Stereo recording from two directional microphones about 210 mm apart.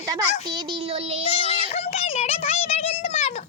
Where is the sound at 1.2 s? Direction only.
30° left (ahead or behind).